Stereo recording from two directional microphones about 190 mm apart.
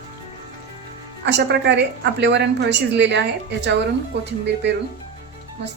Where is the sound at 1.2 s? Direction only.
65° right (ahead or behind).